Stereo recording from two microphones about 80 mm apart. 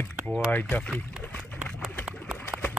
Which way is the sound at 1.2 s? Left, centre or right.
Centre.